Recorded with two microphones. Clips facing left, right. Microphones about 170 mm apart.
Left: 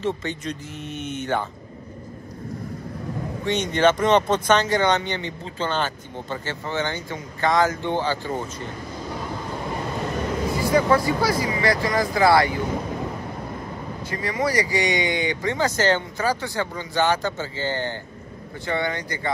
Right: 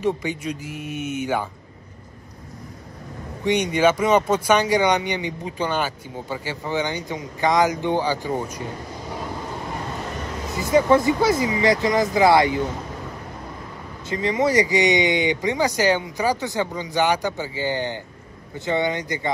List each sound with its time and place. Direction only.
0.0 s speech: 10° right (ahead or behind)
3.4 s speech: 15° right (ahead or behind)
10.6 s speech: 20° right (ahead or behind)
14.1 s speech: 20° right (ahead or behind)